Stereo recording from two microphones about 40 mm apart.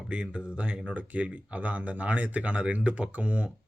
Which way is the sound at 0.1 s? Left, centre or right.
Right.